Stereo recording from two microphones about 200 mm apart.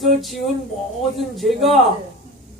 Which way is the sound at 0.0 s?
Centre (ahead or behind).